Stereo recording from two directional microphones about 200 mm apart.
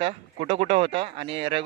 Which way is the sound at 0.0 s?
30° right (ahead or behind).